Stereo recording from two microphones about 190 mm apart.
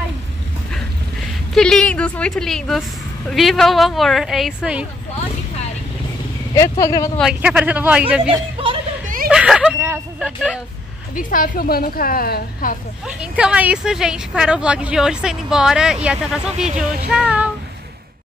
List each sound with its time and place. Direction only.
1.5 s a woman's voice: 5° left (ahead or behind)
6.5 s speech: 15° left (ahead or behind)
7.2 s speech: 5° right (ahead or behind)
9.0 s a sound: 45° right (ahead or behind)
9.3 s a woman's voice: 5° right (ahead or behind)
11.1 s a woman's voice: 45° left (ahead or behind)
13.0 s a woman's voice: 5° right (ahead or behind)